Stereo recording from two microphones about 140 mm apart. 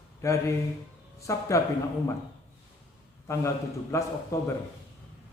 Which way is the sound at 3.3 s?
20° left (ahead or behind).